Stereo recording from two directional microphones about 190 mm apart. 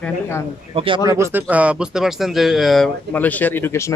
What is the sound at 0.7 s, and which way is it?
Speech, 30° right (ahead or behind).